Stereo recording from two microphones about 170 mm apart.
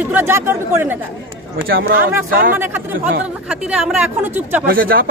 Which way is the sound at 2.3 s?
55° right (ahead or behind).